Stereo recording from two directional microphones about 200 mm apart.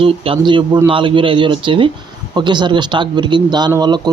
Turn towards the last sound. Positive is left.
turn(degrees=-20)  # may be behind; listen again after turning